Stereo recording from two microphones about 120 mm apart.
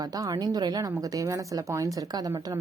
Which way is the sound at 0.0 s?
35° right (ahead or behind).